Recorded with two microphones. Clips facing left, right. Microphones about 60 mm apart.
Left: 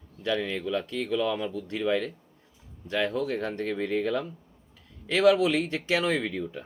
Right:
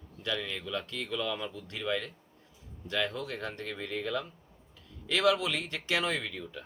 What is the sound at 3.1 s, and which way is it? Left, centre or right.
Speech, centre.